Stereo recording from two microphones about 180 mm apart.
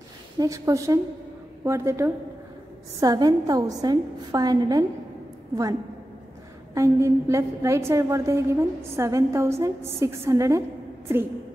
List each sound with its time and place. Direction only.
0.4 s a woman's voice: 20° right (ahead or behind)
6.7 s a woman's voice: 15° right (ahead or behind)